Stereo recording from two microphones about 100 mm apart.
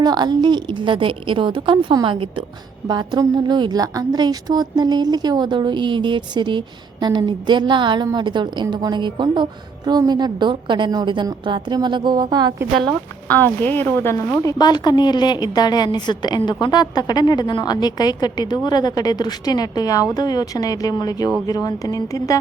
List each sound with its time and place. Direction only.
0.0 s a woman's voice: 45° right (ahead or behind)
2.8 s a woman's voice: 45° right (ahead or behind)
13.2 s speech: 15° left (ahead or behind)
14.4 s a woman's voice: 45° left (ahead or behind)